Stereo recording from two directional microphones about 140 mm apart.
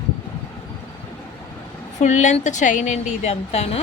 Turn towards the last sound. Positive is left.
turn(degrees=50)  # may be behind; listen again after turning